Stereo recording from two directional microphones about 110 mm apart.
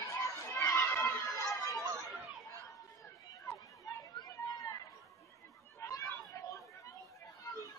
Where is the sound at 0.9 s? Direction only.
20° left (ahead or behind).